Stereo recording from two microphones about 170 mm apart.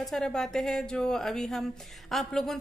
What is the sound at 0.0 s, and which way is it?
A woman's voice, centre (ahead or behind).